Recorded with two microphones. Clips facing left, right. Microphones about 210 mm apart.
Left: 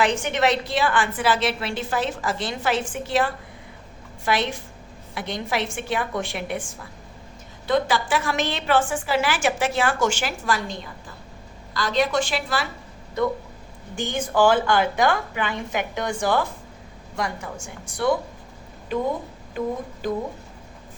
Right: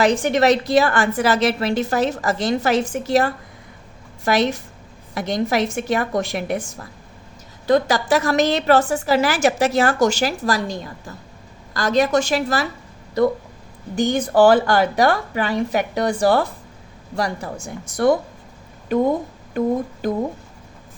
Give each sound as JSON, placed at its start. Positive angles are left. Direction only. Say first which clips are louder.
{"t": 0.0, "sound": "a woman's voice", "louder": "right 5 dB", "side_deg": -35}
{"t": 13.9, "sound": "a woman's voice", "louder": "right 7 dB", "side_deg": -40}